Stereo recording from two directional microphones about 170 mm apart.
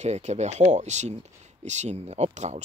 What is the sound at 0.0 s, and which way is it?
Speech, 40° right (ahead or behind).